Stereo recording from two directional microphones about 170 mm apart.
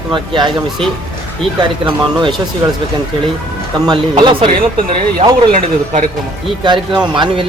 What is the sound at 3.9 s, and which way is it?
Speech, 30° right (ahead or behind).